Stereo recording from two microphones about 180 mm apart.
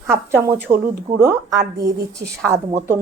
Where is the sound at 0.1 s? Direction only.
15° right (ahead or behind).